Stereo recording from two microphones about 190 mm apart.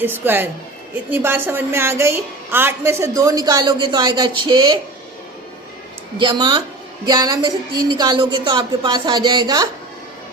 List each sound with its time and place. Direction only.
0.0 s a woman's voice: 10° right (ahead or behind)
6.1 s a woman's voice: 25° right (ahead or behind)